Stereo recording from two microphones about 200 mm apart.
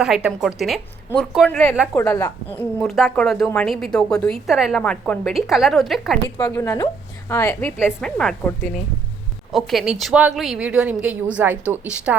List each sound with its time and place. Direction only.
0.0 s a woman's voice: 5° right (ahead or behind)
2.0 s a woman's voice: 15° left (ahead or behind)
6.2 s a woman's voice: 20° left (ahead or behind)
7.9 s a woman's voice: 5° left (ahead or behind)